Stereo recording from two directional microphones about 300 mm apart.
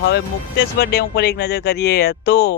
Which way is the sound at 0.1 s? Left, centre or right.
Left.